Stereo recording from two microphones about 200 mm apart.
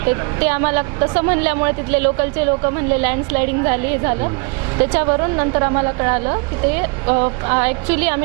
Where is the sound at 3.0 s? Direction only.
15° right (ahead or behind).